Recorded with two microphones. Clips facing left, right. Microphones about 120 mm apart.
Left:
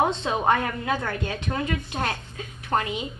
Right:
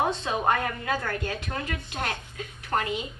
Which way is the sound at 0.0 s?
25° left (ahead or behind).